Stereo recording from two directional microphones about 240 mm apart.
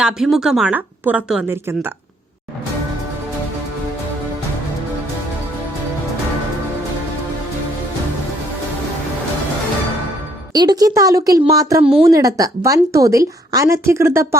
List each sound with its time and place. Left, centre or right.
0.0 s a woman's voice: centre
10.5 s speech: centre